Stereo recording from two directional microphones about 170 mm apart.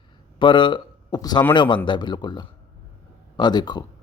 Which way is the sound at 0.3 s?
30° left (ahead or behind).